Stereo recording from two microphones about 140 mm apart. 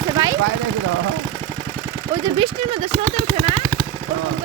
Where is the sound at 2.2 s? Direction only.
35° right (ahead or behind).